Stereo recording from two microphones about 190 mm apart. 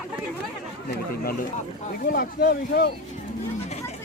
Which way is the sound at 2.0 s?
55° left (ahead or behind).